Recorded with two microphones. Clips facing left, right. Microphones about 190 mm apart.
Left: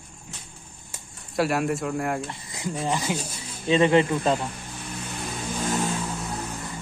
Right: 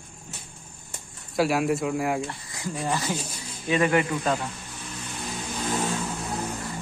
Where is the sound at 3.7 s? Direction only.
25° left (ahead or behind).